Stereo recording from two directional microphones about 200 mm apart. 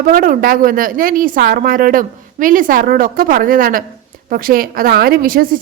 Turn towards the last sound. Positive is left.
turn(degrees=-45)  # may be behind; listen again after turning